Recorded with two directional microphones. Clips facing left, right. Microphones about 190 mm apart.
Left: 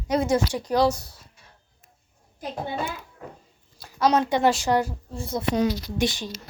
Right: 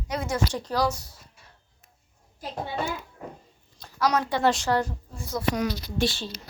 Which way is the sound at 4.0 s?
25° left (ahead or behind).